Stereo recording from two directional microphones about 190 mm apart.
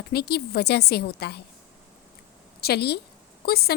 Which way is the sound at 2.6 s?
60° left (ahead or behind).